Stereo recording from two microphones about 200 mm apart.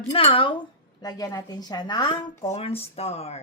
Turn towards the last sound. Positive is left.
turn(degrees=30)  # may be behind; listen again after turning